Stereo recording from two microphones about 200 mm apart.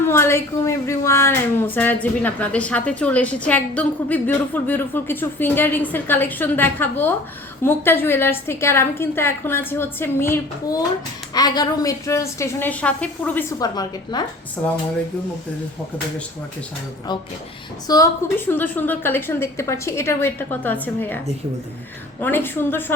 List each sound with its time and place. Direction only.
0.0 s a woman's voice: 10° left (ahead or behind)
13.6 s a woman's voice: 20° left (ahead or behind)
14.6 s a woman's voice: 10° left (ahead or behind)
17.8 s a woman's voice: 15° left (ahead or behind)
22.2 s a woman's voice: 10° left (ahead or behind)